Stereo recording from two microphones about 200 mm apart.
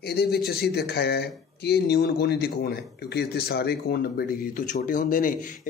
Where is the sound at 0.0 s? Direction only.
50° left (ahead or behind).